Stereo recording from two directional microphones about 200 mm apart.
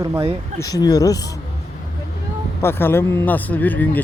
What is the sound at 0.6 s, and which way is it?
Speech, 20° left (ahead or behind).